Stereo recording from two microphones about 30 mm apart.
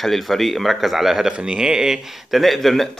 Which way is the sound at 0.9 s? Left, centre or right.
Centre.